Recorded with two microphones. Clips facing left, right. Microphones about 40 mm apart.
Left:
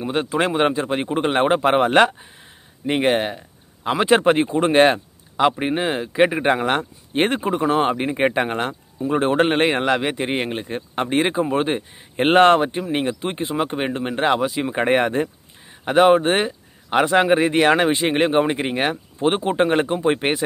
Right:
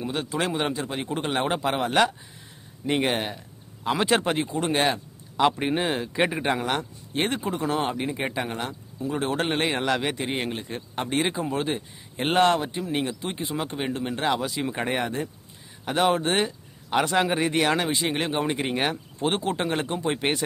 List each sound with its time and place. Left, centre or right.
0.0 s speech: left
2.9 s speech: left
5.4 s a man's voice: centre
6.5 s speech: left
9.9 s speech: left
10.2 s speech: left
14.9 s speech: left
15.8 s speech: left